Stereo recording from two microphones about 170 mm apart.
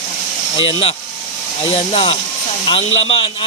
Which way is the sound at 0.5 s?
30° left (ahead or behind).